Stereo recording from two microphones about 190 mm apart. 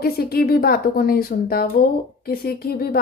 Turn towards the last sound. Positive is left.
turn(degrees=50)  # may be behind; listen again after turning